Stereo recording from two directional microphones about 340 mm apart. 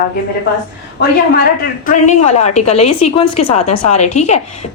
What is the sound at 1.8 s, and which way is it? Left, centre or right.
A woman's voice, left.